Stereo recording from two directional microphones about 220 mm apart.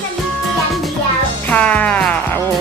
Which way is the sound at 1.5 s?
5° left (ahead or behind).